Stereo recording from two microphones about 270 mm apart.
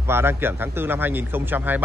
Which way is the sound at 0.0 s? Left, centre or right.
Centre.